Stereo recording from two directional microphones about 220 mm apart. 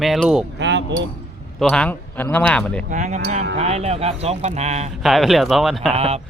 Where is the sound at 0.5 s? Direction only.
55° right (ahead or behind).